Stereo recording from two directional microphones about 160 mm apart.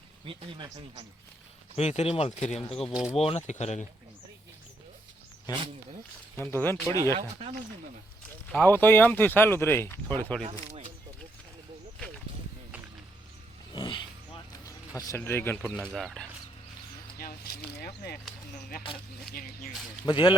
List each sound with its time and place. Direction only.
0.3 s speech: 30° right (ahead or behind)
1.7 s speech: 40° left (ahead or behind)
2.9 s speech: 5° right (ahead or behind)
3.2 s speech: 40° left (ahead or behind)
6.3 s speech: 15° left (ahead or behind)
7.0 s speech: 20° right (ahead or behind)
8.5 s speech: 10° left (ahead or behind)
10.4 s speech: 45° right (ahead or behind)
13.7 s a sound: 30° left (ahead or behind); by 16.2 s centre (ahead or behind)
17.2 s speech: 70° left (ahead or behind)
19.3 s speech: 65° left (ahead or behind)
20.1 s speech: 30° left (ahead or behind)